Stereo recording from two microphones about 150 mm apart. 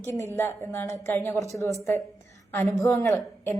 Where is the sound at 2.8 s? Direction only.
20° left (ahead or behind).